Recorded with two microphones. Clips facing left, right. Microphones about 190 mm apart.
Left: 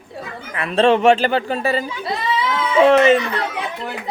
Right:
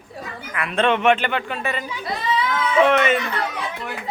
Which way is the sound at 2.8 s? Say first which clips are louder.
Left 7 dB; 30° left (ahead or behind).